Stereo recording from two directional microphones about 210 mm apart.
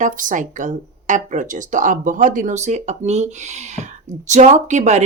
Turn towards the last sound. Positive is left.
turn(degrees=-35)  # may be behind; listen again after turning